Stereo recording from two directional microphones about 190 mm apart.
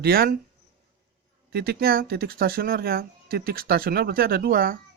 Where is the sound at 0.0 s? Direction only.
50° right (ahead or behind).